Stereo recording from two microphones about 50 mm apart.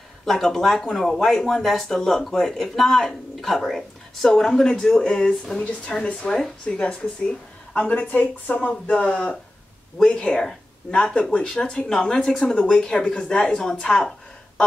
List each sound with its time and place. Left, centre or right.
0.2 s speech: centre